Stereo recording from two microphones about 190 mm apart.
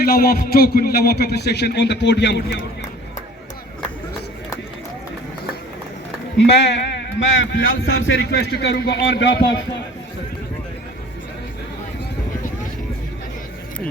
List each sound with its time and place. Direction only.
0.0 s a man's voice: 50° left (ahead or behind); by 2.6 s 65° left (ahead or behind)
6.3 s a man's voice: 65° left (ahead or behind)
7.2 s a man's voice: 85° left